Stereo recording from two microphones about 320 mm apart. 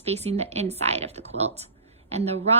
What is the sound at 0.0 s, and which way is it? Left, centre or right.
A woman's voice, centre.